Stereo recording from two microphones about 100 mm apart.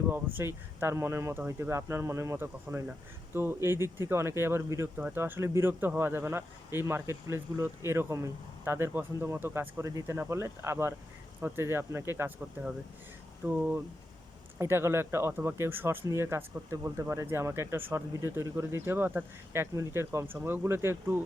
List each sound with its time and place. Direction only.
0.1 s speech: 20° right (ahead or behind)
4.9 s speech: 15° right (ahead or behind)
5.2 s speech: 25° right (ahead or behind)
14.6 s speech: 25° right (ahead or behind)